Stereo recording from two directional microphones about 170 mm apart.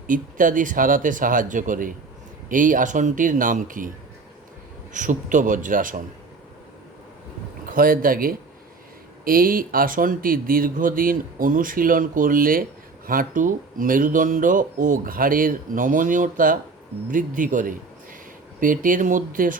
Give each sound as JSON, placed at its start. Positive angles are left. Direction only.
{"t": 0.1, "sound": "speech", "side_deg": -50}
{"t": 4.9, "sound": "speech", "side_deg": -50}
{"t": 7.7, "sound": "speech", "side_deg": -55}